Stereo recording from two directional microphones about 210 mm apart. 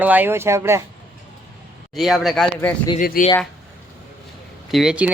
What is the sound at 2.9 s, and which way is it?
Speech, 40° left (ahead or behind).